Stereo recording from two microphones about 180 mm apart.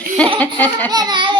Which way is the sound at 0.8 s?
20° right (ahead or behind).